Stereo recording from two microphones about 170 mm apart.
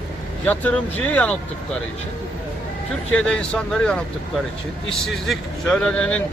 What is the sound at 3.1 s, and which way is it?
A man's voice, 5° left (ahead or behind).